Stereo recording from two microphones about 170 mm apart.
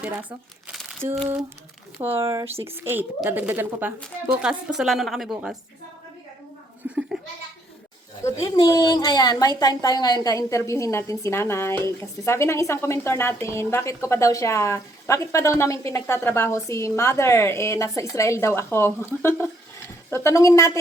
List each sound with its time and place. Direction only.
0.0 s speech: 10° right (ahead or behind)
2.0 s a woman's voice: 15° right (ahead or behind)
6.8 s goat: 5° right (ahead or behind)
8.4 s a woman's voice: 25° left (ahead or behind)